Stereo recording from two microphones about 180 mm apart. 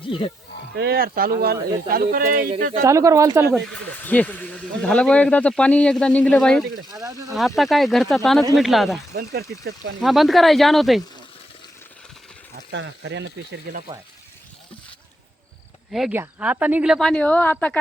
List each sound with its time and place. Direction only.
0.1 s speech: 30° left (ahead or behind)
0.8 s speech: 60° right (ahead or behind)
2.8 s speech: 15° right (ahead or behind)
4.0 s speech: 10° left (ahead or behind)
6.9 s speech: 20° right (ahead or behind)
7.3 s speech: centre (ahead or behind)
12.7 s speech: 85° right
15.9 s speech: centre (ahead or behind)